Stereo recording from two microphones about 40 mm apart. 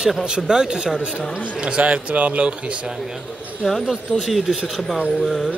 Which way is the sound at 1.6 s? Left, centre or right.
Right.